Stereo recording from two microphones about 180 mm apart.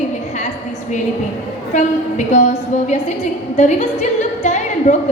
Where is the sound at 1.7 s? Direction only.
40° left (ahead or behind).